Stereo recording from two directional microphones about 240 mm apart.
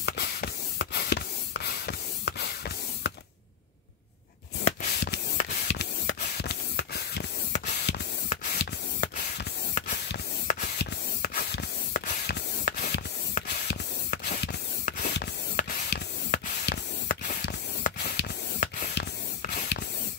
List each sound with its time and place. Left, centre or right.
0.0 s spray: left
4.6 s a sound: left
5.7 s spray: left